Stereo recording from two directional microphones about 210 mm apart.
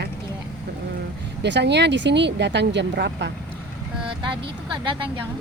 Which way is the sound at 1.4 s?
55° right (ahead or behind).